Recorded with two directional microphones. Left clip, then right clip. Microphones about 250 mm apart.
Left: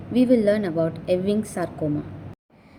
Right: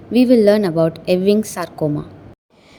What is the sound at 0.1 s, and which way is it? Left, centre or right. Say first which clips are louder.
A woman's voice: right 7 dB; right.